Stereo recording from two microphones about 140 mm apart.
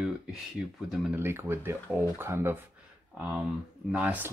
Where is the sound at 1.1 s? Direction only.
15° right (ahead or behind).